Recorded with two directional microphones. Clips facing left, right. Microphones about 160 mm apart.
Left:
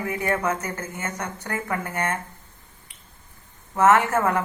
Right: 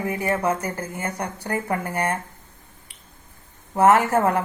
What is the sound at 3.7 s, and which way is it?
Speech, 35° right (ahead or behind).